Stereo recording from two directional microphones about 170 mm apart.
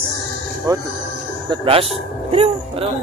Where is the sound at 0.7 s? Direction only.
20° right (ahead or behind).